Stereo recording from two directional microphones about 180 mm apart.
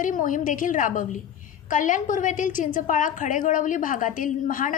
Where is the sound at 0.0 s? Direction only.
45° left (ahead or behind).